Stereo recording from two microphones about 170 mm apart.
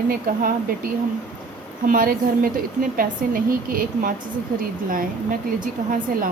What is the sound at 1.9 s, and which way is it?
A woman's voice, 55° right (ahead or behind).